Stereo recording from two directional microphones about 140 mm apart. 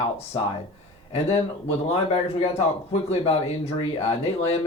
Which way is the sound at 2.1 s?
45° left (ahead or behind).